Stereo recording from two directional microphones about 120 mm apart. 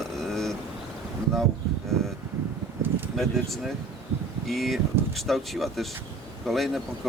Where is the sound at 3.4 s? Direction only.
Centre (ahead or behind).